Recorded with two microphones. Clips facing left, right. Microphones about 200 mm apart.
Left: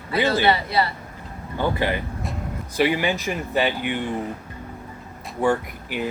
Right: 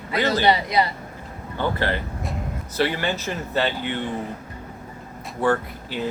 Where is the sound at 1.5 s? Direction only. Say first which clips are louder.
Left 1 dB; 15° left (ahead or behind).